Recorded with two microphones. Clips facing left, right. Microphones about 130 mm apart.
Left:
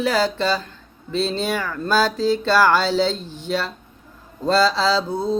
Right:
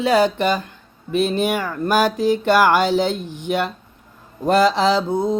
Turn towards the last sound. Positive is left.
turn(degrees=-20)  # may be behind; listen again after turning